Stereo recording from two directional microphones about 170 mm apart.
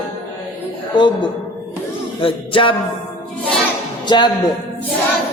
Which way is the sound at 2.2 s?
30° left (ahead or behind).